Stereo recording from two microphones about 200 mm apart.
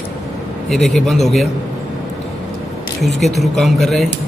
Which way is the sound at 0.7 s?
Centre (ahead or behind).